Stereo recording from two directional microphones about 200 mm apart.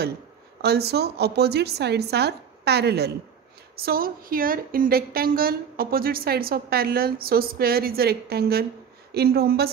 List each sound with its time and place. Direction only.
0.6 s a woman's voice: 55° right (ahead or behind)